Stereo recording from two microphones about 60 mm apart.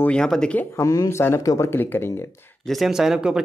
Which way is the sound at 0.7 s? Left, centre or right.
Left.